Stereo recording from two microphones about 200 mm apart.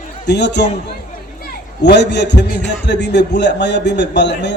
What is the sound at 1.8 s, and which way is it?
A man's voice, 60° left (ahead or behind).